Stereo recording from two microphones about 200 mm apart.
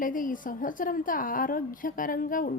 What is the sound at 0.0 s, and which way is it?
A woman's voice, 40° left (ahead or behind).